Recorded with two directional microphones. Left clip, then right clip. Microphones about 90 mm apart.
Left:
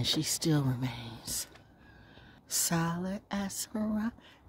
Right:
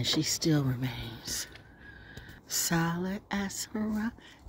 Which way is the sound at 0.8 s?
25° left (ahead or behind).